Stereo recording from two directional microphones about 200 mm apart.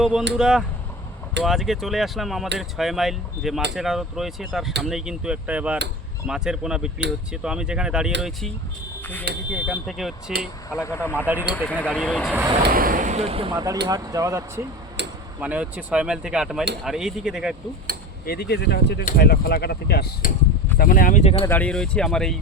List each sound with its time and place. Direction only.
0.0 s speech: 5° right (ahead or behind)
9.3 s speech: 55° right (ahead or behind)
9.8 s speech: centre (ahead or behind)
10.7 s speech: 15° left (ahead or behind)
12.6 s speech: 45° right (ahead or behind); by 14.6 s 15° right (ahead or behind)
15.0 s a sound: 60° right (ahead or behind)
15.4 s speech: 5° right (ahead or behind)
18.3 s speech: 55° left (ahead or behind); by 21.4 s 35° left (ahead or behind)
21.4 s speech: 10° left (ahead or behind)